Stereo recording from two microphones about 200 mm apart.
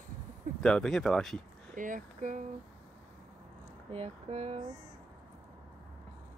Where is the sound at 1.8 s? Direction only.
40° right (ahead or behind).